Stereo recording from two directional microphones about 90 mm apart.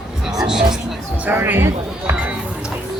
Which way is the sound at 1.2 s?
25° right (ahead or behind).